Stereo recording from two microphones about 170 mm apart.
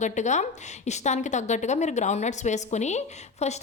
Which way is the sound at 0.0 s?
45° left (ahead or behind).